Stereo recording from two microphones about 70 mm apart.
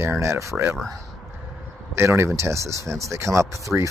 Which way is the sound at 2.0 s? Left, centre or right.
Right.